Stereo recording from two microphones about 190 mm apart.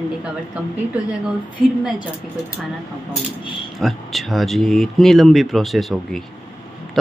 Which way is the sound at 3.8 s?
Centre (ahead or behind).